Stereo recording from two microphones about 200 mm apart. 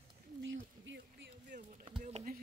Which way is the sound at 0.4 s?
65° right (ahead or behind).